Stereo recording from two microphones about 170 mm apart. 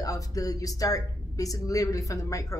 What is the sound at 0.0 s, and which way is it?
Speech, 20° left (ahead or behind).